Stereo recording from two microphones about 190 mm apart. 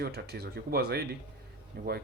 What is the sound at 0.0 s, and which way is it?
Speech, 60° right (ahead or behind).